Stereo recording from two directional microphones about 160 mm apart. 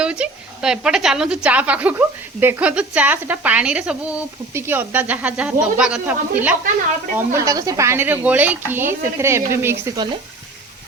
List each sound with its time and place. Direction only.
0.0 s a woman's voice: 5° right (ahead or behind)
7.2 s a woman's voice: 20° right (ahead or behind)